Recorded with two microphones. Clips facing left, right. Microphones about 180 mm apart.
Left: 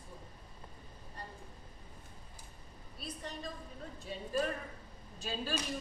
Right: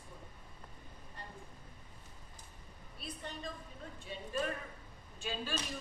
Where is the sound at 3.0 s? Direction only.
35° left (ahead or behind).